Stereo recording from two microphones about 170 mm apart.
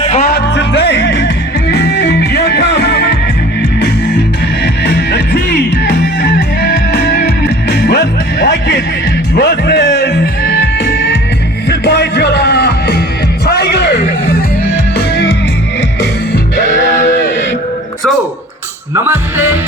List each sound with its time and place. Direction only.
0.0 s music: 45° left (ahead or behind)
0.3 s music: 80° left
14.9 s music: 90° left
19.0 s music: 10° right (ahead or behind)